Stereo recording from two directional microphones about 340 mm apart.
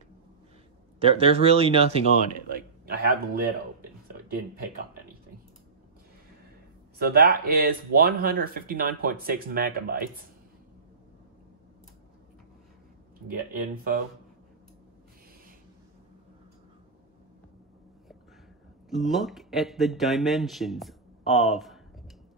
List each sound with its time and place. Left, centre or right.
0.9 s speech: centre
2.5 s speech: right
7.0 s speech: right
13.5 s speech: right
18.9 s speech: centre